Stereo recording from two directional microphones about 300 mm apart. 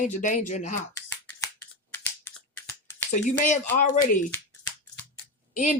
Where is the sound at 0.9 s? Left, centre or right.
Centre.